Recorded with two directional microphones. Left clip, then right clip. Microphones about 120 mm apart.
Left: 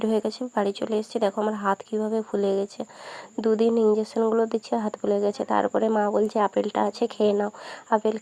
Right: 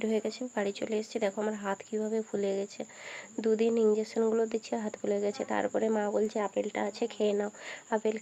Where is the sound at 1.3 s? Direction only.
30° left (ahead or behind).